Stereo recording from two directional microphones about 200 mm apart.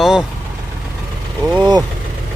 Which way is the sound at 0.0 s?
5° right (ahead or behind).